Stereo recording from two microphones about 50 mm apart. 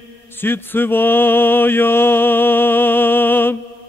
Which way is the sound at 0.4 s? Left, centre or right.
Left.